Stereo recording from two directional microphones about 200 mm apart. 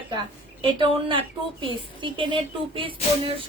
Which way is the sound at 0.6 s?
25° right (ahead or behind).